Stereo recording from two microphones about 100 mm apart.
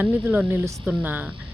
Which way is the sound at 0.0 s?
15° right (ahead or behind).